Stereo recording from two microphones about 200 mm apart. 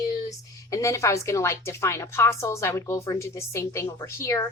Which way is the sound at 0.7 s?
15° left (ahead or behind).